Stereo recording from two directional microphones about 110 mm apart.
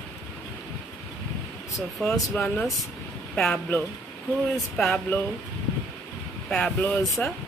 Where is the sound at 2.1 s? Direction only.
15° left (ahead or behind).